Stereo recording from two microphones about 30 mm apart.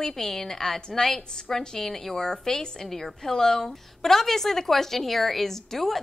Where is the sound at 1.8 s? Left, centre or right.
Centre.